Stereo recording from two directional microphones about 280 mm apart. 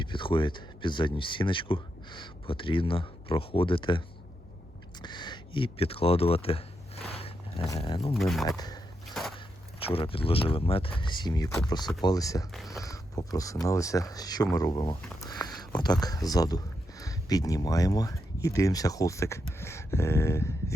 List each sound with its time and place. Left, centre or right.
0.0 s speech: centre
5.0 s a sound: centre
8.1 s speech: centre
8.4 s speech: centre
9.2 s walk: centre
9.8 s speech: centre
12.5 s speech: centre
12.8 s speech: centre